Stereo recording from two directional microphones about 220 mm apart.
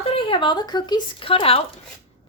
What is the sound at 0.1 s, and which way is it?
A woman's voice, 20° left (ahead or behind).